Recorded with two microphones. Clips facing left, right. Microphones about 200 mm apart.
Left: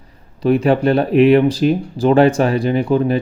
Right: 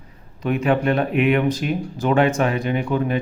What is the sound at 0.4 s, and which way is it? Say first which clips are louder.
A man's voice: left 6 dB; 35° left (ahead or behind).